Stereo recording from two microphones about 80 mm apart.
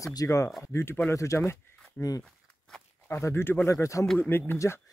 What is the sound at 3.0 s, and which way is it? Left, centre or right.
Speech, left.